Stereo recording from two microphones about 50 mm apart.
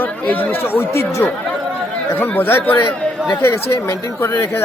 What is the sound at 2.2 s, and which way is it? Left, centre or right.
Speech, left.